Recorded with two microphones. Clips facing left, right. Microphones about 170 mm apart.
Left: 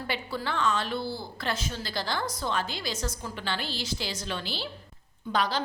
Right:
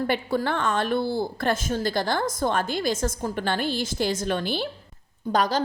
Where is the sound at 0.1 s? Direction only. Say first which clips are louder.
Right 8 dB; 50° right (ahead or behind).